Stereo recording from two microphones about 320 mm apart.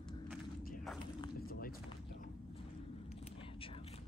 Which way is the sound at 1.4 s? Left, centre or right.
Left.